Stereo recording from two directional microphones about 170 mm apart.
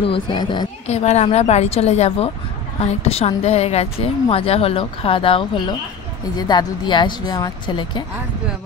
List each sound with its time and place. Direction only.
0.0 s speech: 30° left (ahead or behind)
0.8 s a woman's voice: 40° left (ahead or behind)